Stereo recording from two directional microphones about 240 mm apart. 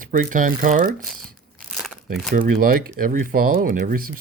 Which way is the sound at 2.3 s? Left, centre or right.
Right.